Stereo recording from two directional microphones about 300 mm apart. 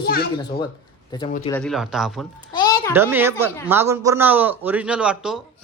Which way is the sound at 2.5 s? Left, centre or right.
Centre.